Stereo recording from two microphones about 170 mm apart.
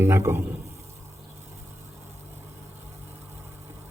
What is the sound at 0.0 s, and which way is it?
Speech, 15° right (ahead or behind).